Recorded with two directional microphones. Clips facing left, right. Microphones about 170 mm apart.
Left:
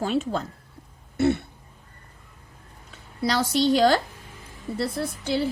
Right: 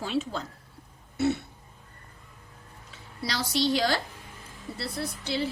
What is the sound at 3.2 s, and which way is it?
A woman's voice, 50° left (ahead or behind).